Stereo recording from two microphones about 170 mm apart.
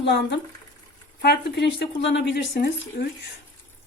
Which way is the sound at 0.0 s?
90° left.